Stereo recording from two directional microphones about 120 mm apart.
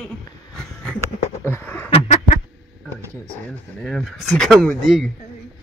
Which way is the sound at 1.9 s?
55° left (ahead or behind).